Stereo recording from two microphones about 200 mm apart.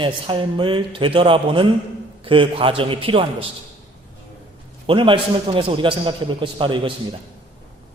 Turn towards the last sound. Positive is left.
turn(degrees=-25)  # may be behind; listen again after turning